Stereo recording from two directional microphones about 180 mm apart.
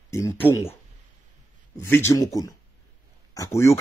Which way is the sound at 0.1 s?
15° left (ahead or behind).